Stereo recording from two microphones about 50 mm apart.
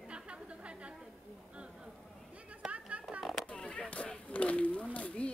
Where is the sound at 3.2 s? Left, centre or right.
Centre.